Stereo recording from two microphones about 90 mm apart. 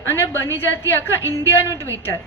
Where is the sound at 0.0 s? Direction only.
25° left (ahead or behind).